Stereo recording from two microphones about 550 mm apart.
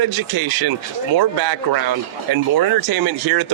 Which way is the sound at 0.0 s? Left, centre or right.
Right.